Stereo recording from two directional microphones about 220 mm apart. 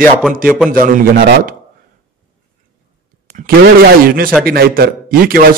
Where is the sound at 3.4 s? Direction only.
40° right (ahead or behind).